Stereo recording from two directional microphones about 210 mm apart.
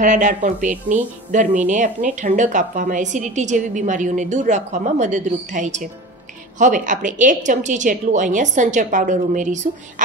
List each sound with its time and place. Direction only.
0.0 s speech: 35° right (ahead or behind)